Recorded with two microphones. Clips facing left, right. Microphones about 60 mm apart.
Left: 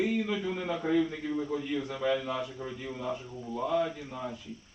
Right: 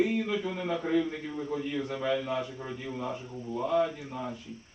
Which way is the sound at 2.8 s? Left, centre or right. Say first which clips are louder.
Even; centre.